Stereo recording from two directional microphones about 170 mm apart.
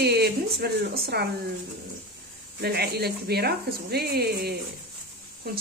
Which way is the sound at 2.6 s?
70° right (ahead or behind).